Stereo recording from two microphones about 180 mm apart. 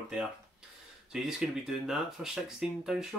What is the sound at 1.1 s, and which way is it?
Speech, 5° right (ahead or behind).